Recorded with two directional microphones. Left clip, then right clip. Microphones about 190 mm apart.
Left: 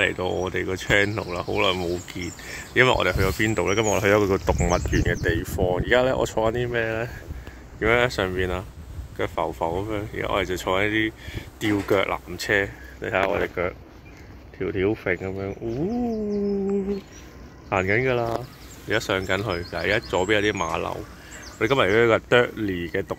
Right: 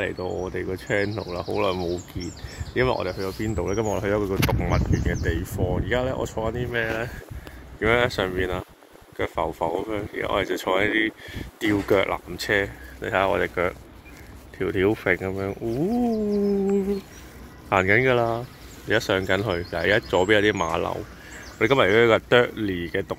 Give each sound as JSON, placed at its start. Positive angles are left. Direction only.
{"t": 0.0, "sound": "speech", "side_deg": 0}
{"t": 3.0, "sound": "speech", "side_deg": 15}
{"t": 7.8, "sound": "speech", "side_deg": -5}
{"t": 17.6, "sound": "speech", "side_deg": -20}
{"t": 21.5, "sound": "speech", "side_deg": -10}